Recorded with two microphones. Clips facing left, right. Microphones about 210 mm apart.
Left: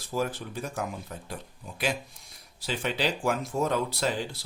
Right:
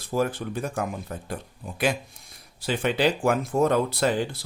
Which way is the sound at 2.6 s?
55° right (ahead or behind).